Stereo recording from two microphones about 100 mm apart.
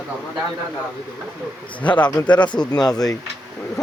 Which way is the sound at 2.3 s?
45° left (ahead or behind).